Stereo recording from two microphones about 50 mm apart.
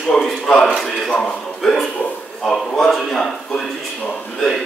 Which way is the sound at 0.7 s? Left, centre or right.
Centre.